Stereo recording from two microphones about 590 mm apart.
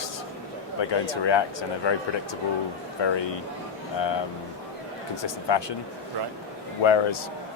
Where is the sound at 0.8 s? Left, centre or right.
Left.